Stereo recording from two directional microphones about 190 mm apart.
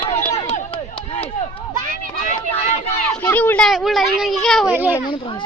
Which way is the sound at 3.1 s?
10° left (ahead or behind).